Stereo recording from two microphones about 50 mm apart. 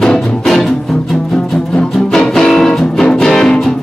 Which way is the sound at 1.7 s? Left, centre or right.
Centre.